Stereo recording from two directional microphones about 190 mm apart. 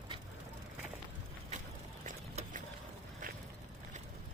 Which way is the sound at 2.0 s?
40° right (ahead or behind).